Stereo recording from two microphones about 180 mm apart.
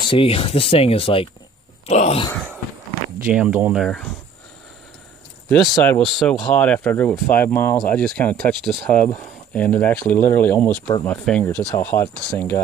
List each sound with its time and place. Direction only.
0.0 s speech: 30° left (ahead or behind)
2.3 s a sound: 5° left (ahead or behind)
3.3 s speech: 5° right (ahead or behind)
5.5 s speech: 5° left (ahead or behind)